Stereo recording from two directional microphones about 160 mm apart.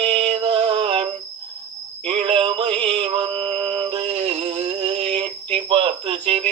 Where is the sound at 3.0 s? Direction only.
35° right (ahead or behind).